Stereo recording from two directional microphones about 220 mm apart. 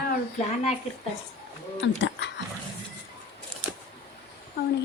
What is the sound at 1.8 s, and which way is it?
Dog, 55° left (ahead or behind).